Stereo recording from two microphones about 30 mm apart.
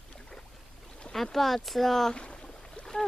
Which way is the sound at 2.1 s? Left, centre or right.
Left.